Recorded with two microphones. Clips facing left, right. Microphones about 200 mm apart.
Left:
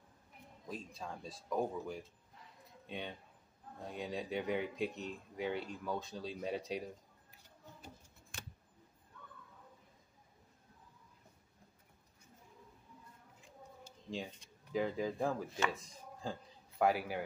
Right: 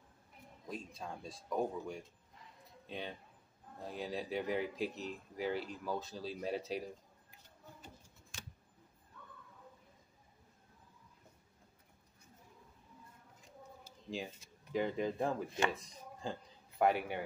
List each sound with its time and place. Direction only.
0.7 s speech: centre (ahead or behind)
8.3 s keys jangling: 60° left (ahead or behind)
14.1 s speech: 5° right (ahead or behind)